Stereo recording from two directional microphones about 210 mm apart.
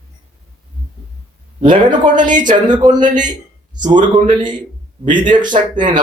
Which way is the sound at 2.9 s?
35° right (ahead or behind).